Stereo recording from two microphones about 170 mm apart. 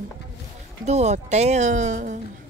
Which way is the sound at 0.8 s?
40° right (ahead or behind).